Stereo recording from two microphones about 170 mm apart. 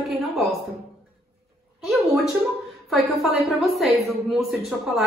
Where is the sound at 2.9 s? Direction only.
Centre (ahead or behind).